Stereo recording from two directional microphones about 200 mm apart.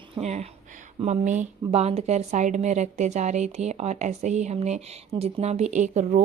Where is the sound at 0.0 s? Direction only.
35° right (ahead or behind).